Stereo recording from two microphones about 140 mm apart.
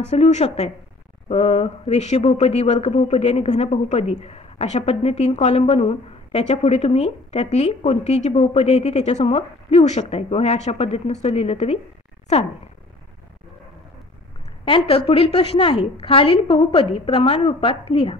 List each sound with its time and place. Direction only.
0.1 s speech: 50° left (ahead or behind)
14.6 s a woman's voice: 40° left (ahead or behind)